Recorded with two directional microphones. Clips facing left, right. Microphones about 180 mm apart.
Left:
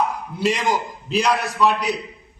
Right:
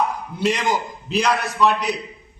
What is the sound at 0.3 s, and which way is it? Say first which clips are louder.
A man's voice: even; centre (ahead or behind).